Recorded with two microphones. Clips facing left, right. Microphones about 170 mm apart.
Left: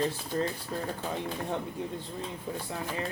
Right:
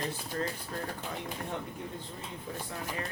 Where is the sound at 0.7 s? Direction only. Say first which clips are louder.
Left 3 dB; 25° left (ahead or behind).